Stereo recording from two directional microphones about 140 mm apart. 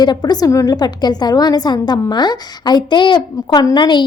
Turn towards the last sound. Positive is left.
turn(degrees=30)  # may be behind; listen again after turning